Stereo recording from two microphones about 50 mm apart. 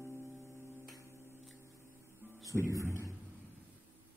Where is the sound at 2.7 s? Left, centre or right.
Right.